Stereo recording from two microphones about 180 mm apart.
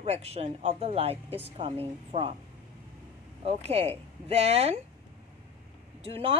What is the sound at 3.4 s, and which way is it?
Speech, 35° right (ahead or behind).